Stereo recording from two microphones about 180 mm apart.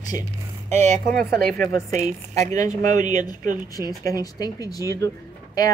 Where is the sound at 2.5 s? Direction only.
20° left (ahead or behind).